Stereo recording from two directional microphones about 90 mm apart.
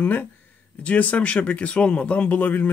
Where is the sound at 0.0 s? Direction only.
20° left (ahead or behind).